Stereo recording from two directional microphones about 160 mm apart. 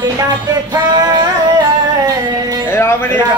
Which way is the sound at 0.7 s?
25° right (ahead or behind).